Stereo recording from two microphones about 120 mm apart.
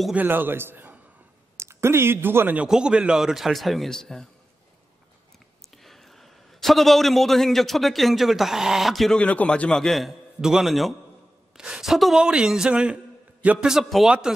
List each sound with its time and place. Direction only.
0.1 s a man's voice: 15° right (ahead or behind); by 4.3 s 5° left (ahead or behind)
5.6 s a man's voice: centre (ahead or behind)